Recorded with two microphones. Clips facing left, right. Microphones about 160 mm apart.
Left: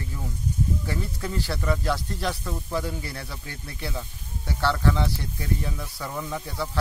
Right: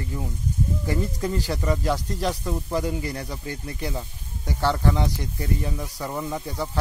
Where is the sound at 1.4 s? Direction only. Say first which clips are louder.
Even; 10° right (ahead or behind).